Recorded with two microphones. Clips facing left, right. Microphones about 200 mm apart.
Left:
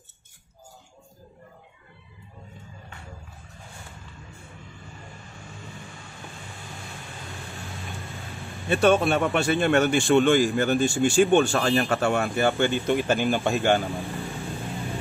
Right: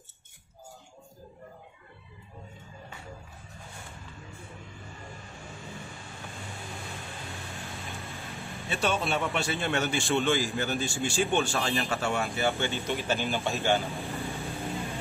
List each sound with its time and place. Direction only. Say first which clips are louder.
8.6 s speech: left 10 dB; 50° left (ahead or behind)
14.3 s vehicle: left 1 dB; centre (ahead or behind)